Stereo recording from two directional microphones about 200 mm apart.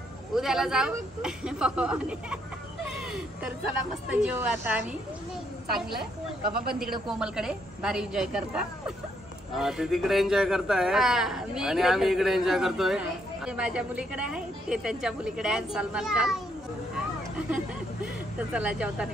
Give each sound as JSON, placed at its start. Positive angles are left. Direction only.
{"t": 0.3, "sound": "a man's voice", "side_deg": 0}
{"t": 2.9, "sound": "a sound", "side_deg": -5}
{"t": 4.3, "sound": "a woman's voice", "side_deg": -5}
{"t": 6.4, "sound": "speech", "side_deg": -50}
{"t": 7.1, "sound": "a man's voice", "side_deg": -5}
{"t": 18.5, "sound": "a woman's voice", "side_deg": -5}